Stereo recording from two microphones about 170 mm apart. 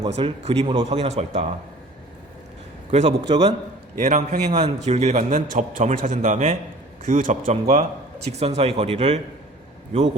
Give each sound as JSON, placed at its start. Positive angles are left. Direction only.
{"t": 0.1, "sound": "speech", "side_deg": -35}
{"t": 0.9, "sound": "speech", "side_deg": -40}
{"t": 2.9, "sound": "speech", "side_deg": -35}
{"t": 3.9, "sound": "a man's voice", "side_deg": -45}